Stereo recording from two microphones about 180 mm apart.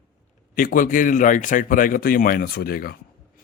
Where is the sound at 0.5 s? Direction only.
50° left (ahead or behind).